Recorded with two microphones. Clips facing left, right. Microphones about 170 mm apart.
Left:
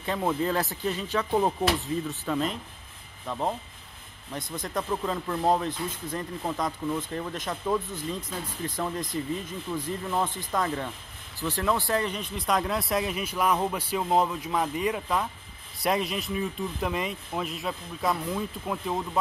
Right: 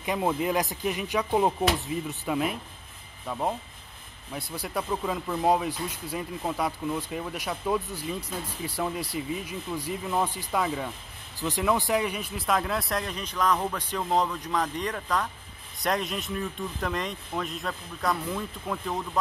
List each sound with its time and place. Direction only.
0.0 s speech: 15° right (ahead or behind); by 18.9 s 5° left (ahead or behind)